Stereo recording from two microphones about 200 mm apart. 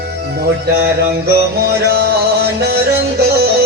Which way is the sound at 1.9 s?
55° right (ahead or behind).